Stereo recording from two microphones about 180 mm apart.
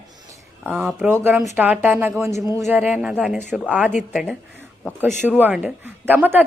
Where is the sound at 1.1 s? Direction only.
15° right (ahead or behind).